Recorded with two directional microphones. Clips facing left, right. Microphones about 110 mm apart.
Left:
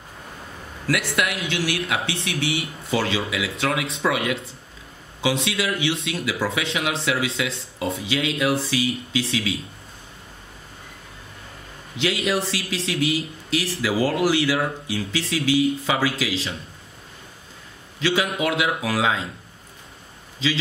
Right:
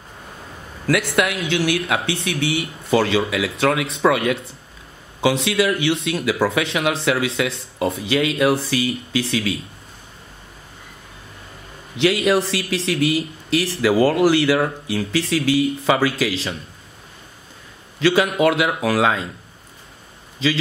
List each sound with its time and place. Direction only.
0.8 s speech: 50° right (ahead or behind)
12.0 s speech: 60° right (ahead or behind)
18.0 s speech: 60° right (ahead or behind)